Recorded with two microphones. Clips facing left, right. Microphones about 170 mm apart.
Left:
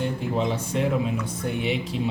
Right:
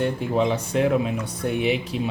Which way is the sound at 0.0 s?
65° right (ahead or behind).